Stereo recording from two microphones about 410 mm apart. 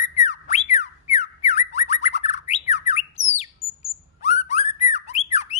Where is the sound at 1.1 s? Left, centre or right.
Centre.